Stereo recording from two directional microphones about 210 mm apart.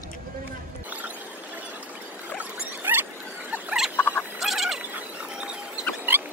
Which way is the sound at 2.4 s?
10° right (ahead or behind).